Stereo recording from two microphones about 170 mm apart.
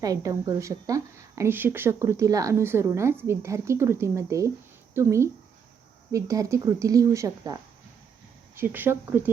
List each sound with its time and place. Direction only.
0.0 s speech: 20° right (ahead or behind)